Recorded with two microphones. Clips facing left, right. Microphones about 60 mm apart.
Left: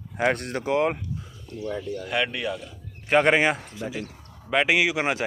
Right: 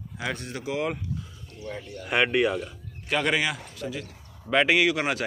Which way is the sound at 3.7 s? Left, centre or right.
Left.